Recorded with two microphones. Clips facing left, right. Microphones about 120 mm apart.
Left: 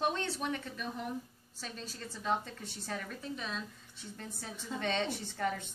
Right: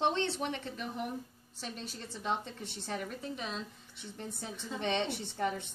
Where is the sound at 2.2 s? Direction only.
20° right (ahead or behind).